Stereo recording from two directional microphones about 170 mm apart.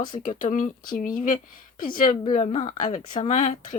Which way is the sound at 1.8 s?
55° left (ahead or behind).